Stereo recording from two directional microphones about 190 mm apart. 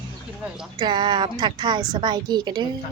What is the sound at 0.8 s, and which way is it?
A woman's voice, 25° right (ahead or behind).